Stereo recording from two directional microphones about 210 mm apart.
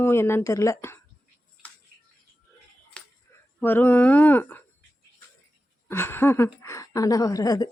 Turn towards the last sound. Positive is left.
turn(degrees=15)  # may be behind; listen again after turning